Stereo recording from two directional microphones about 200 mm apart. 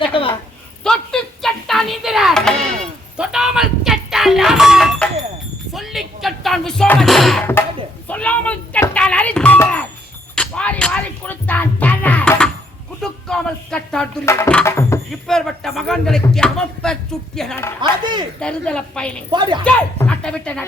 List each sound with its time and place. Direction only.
0.1 s a sound: 25° left (ahead or behind)
0.9 s music: 5° left (ahead or behind)
8.0 s doorbell: 5° left (ahead or behind)
10.3 s music: 5° left (ahead or behind)
13.0 s a sound: 5° left (ahead or behind)
14.3 s music: 10° left (ahead or behind)
15.1 s a sound: centre (ahead or behind)
17.7 s speech: 20° right (ahead or behind)
18.3 s a woman's voice: 5° left (ahead or behind)
19.3 s speech: 25° right (ahead or behind)
19.6 s speech: 5° left (ahead or behind)